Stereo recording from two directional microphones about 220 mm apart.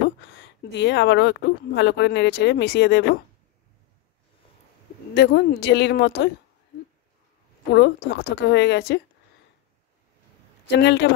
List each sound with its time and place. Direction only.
0.4 s speech: 50° left (ahead or behind)
5.1 s speech: 50° left (ahead or behind)
7.7 s speech: 50° left (ahead or behind)
10.7 s speech: 50° left (ahead or behind)